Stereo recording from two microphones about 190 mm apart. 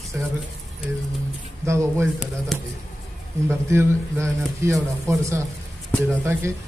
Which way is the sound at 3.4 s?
15° right (ahead or behind).